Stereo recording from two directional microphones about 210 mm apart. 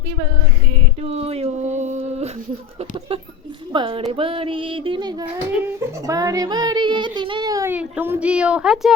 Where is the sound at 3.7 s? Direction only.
25° right (ahead or behind).